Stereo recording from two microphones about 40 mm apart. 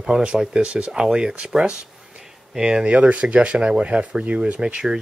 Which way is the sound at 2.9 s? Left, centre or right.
Right.